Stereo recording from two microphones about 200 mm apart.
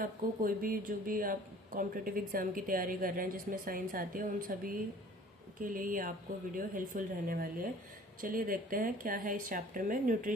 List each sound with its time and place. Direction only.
0.0 s speech: 45° right (ahead or behind)